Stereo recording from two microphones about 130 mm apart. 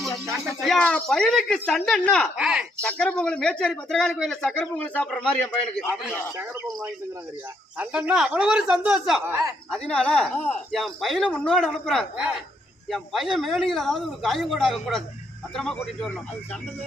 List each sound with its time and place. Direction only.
0.3 s speech: centre (ahead or behind)
2.4 s speech: 5° right (ahead or behind)
2.8 s speech: 5° left (ahead or behind)
7.8 s speech: 10° right (ahead or behind)
9.9 s speech: 10° left (ahead or behind)
10.7 s speech: centre (ahead or behind)